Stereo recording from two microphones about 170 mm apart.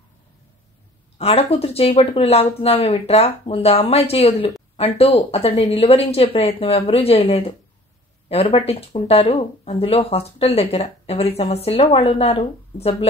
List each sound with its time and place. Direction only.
1.1 s speech: 35° left (ahead or behind)